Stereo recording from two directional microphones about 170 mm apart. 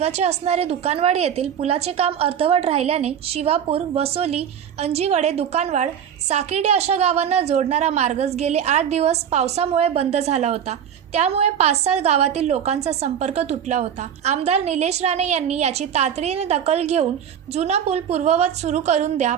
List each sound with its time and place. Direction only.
0.0 s a woman's voice: 40° right (ahead or behind)